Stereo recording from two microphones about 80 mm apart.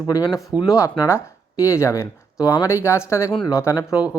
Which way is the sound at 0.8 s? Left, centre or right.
Left.